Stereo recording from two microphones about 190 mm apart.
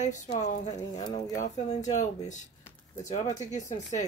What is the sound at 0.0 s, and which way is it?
Speech, 40° left (ahead or behind).